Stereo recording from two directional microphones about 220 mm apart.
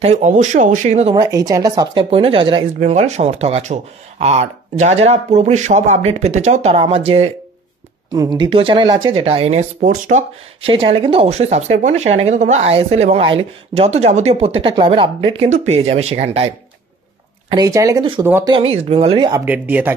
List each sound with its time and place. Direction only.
0.0 s speech: 30° right (ahead or behind)
1.1 s speech: 20° right (ahead or behind)
17.5 s speech: 15° right (ahead or behind)
18.5 s speech: 25° right (ahead or behind)
19.4 s speech: 5° right (ahead or behind)